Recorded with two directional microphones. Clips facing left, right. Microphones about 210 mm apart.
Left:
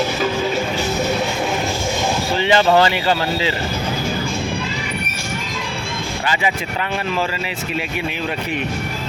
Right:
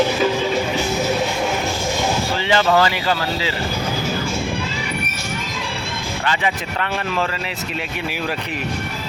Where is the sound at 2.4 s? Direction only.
20° left (ahead or behind).